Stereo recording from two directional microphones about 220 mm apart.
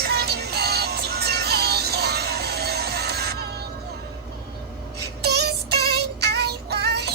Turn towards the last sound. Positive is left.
turn(degrees=-50)  # may be behind; listen again after turning